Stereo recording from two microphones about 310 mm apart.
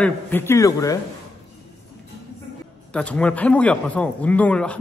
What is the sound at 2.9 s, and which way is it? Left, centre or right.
A man's voice, centre.